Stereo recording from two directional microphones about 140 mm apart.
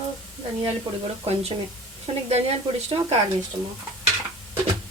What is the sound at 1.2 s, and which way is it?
Speech, 45° right (ahead or behind).